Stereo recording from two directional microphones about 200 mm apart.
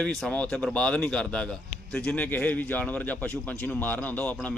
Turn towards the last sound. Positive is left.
turn(degrees=5)  # may be behind; listen again after turning